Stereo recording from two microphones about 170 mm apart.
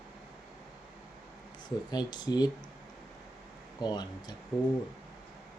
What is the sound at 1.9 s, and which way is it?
Speech, 25° left (ahead or behind).